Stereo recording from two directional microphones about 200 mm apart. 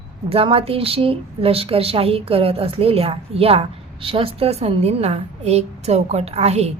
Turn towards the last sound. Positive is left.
turn(degrees=-30)  # may be behind; listen again after turning